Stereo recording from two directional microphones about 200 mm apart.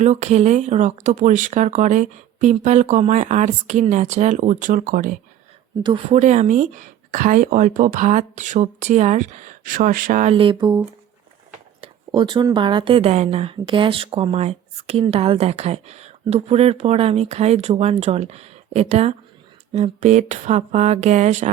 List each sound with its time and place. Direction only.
0.0 s speech: 35° right (ahead or behind)
5.8 s speech: 25° right (ahead or behind)
6.1 s speech: 35° right (ahead or behind)
10.3 s speech: 25° right (ahead or behind)
11.8 s speech: 25° right (ahead or behind)